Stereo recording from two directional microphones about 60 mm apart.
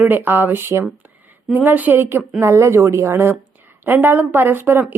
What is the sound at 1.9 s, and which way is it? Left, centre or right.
Speech, right.